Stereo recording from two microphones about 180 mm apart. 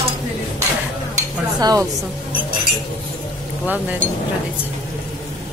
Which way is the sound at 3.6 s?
10° right (ahead or behind).